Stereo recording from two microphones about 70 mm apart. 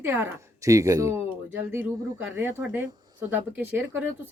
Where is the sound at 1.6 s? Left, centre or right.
Right.